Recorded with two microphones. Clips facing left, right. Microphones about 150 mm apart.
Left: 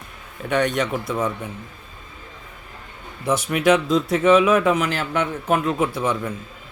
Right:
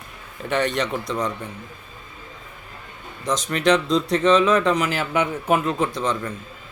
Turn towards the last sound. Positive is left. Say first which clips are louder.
# left 1 dB
turn(degrees=10)  # may be behind; listen again after turning